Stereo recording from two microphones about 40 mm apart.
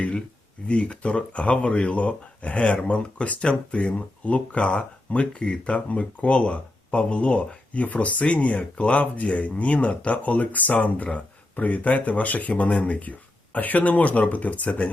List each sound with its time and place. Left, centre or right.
0.7 s speech: left